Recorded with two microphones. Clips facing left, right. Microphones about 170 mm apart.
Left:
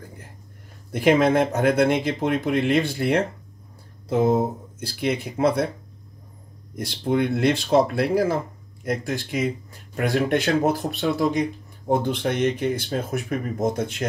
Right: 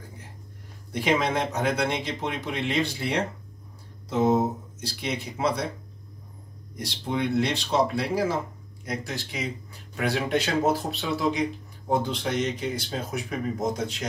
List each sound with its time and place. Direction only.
0.9 s speech: 50° left (ahead or behind)
4.7 s speech: 55° left (ahead or behind)
6.8 s speech: 55° left (ahead or behind)